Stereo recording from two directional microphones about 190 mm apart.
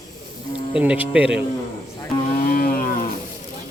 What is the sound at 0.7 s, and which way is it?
Speech, 5° right (ahead or behind).